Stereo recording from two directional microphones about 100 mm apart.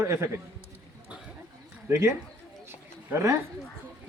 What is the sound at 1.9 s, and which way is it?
Speech, 25° right (ahead or behind).